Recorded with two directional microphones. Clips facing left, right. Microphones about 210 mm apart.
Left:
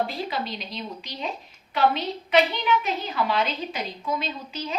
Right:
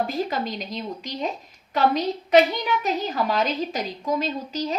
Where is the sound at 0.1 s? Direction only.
45° right (ahead or behind).